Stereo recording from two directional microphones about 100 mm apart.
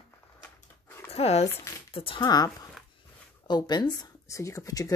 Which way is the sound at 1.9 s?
65° left (ahead or behind).